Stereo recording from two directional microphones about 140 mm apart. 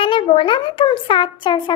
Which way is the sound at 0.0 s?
40° left (ahead or behind).